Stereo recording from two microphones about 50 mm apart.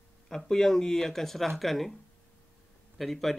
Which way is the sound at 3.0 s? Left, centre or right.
Centre.